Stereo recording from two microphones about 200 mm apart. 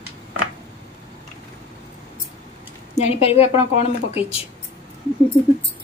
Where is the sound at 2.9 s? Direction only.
30° left (ahead or behind).